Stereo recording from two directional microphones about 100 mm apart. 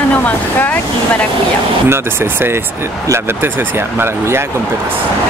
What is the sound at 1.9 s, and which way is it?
Speech, 25° right (ahead or behind).